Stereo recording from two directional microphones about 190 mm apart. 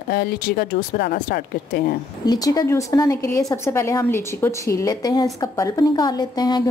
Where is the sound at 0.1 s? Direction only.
50° left (ahead or behind).